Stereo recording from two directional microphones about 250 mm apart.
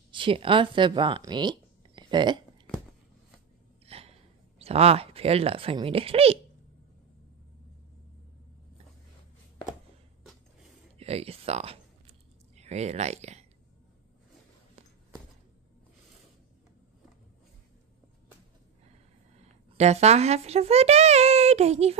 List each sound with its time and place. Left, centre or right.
0.1 s speech: right
3.8 s speech: right
11.0 s a sound: right
18.9 s speech: right